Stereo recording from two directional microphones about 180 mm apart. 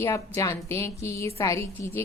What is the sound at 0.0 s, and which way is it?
A woman's voice, 15° left (ahead or behind).